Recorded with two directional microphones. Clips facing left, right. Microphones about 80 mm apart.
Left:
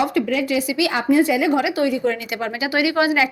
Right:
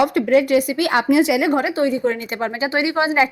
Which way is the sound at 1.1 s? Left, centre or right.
Right.